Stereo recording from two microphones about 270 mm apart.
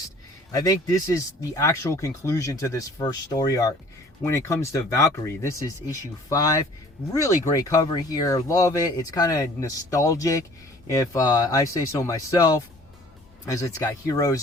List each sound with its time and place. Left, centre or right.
0.5 s speech: centre